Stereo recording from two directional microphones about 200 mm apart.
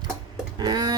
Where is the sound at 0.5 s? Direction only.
20° right (ahead or behind).